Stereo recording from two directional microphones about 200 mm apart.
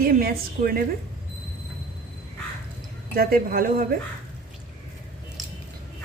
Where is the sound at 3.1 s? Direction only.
45° right (ahead or behind).